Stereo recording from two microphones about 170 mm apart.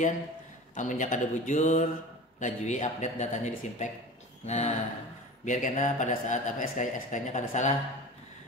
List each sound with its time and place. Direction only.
0.7 s speech: 50° left (ahead or behind)